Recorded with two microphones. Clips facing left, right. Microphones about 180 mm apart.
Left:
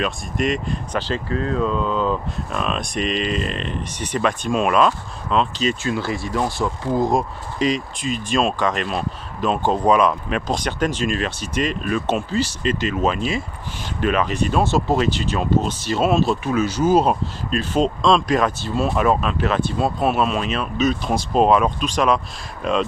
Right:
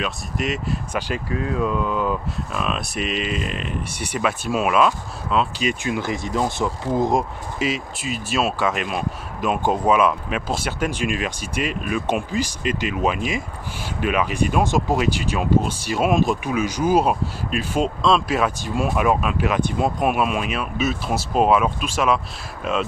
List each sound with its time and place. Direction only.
0.0 s speech: centre (ahead or behind); by 7.2 s 20° right (ahead or behind)
7.5 s speech: 5° right (ahead or behind)
22.6 s cattle: 5° right (ahead or behind)